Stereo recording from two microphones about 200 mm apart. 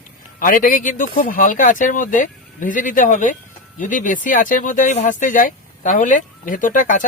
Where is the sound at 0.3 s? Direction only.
45° left (ahead or behind).